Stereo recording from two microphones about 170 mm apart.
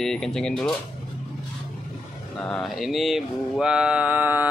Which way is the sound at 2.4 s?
Centre (ahead or behind).